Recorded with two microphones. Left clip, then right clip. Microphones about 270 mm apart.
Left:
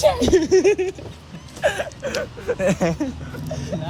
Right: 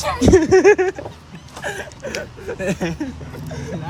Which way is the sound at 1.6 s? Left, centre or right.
Centre.